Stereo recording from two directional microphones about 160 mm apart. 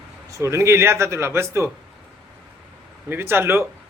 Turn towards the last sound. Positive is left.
turn(degrees=-15)  # may be behind; listen again after turning